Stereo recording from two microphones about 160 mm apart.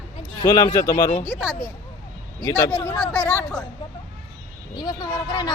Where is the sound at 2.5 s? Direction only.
25° left (ahead or behind).